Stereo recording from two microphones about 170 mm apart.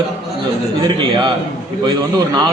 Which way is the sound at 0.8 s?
30° right (ahead or behind).